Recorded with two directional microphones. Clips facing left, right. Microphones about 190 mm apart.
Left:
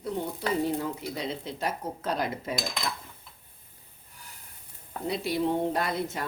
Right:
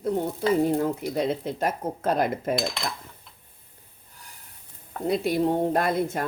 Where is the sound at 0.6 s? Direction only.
50° right (ahead or behind).